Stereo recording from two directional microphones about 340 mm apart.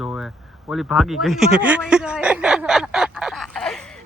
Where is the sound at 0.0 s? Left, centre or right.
Centre.